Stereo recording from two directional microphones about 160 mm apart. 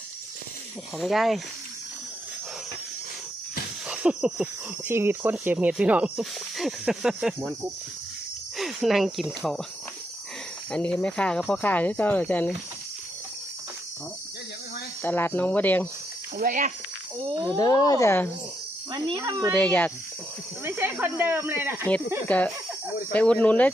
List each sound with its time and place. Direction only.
0.9 s speech: centre (ahead or behind)
3.8 s a sound: 5° right (ahead or behind)
4.9 s speech: 15° right (ahead or behind)
7.3 s speech: 20° right (ahead or behind)
8.5 s speech: centre (ahead or behind)
10.7 s speech: 5° left (ahead or behind)
15.0 s speech: 10° left (ahead or behind)
16.4 s speech: 50° right (ahead or behind)
17.6 s speech: 25° left (ahead or behind)
18.9 s speech: 30° right (ahead or behind)
19.5 s speech: 10° left (ahead or behind)
20.7 s speech: 15° right (ahead or behind)
22.3 s speech: 10° left (ahead or behind)